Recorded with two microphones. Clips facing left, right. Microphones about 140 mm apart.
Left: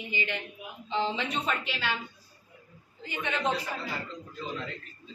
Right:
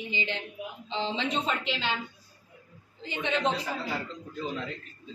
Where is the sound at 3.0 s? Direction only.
25° right (ahead or behind).